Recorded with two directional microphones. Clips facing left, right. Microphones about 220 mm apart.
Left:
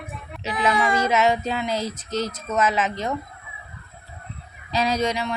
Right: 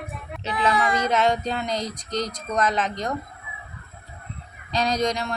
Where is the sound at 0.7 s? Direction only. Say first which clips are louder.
Left 2 dB; 30° left (ahead or behind).